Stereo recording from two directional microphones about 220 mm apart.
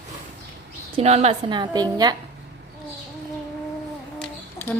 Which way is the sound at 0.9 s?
30° right (ahead or behind).